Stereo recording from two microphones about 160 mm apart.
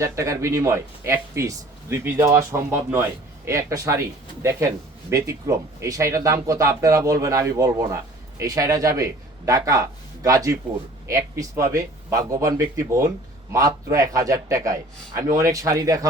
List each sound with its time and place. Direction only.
0.0 s speech: 20° right (ahead or behind)